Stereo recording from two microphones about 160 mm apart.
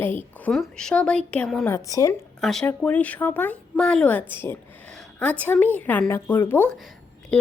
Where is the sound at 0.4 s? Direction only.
5° left (ahead or behind).